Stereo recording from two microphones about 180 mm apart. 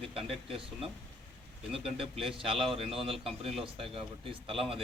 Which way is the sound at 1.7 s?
30° right (ahead or behind).